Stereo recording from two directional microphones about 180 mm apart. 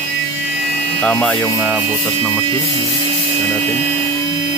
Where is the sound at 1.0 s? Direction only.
5° left (ahead or behind).